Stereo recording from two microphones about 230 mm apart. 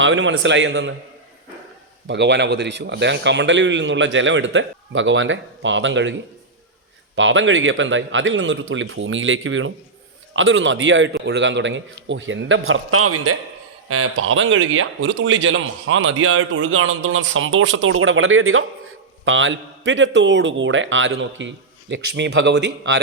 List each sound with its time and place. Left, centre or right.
0.0 s a man's voice: right
2.0 s a man's voice: right
7.2 s a man's voice: right